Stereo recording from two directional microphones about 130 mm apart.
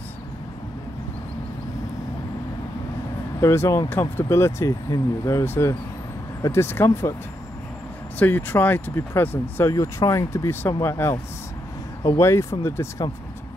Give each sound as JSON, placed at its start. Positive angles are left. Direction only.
{"t": 3.3, "sound": "speech", "side_deg": 20}
{"t": 8.2, "sound": "speech", "side_deg": 15}